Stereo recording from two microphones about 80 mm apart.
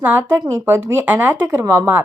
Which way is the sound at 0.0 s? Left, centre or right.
Right.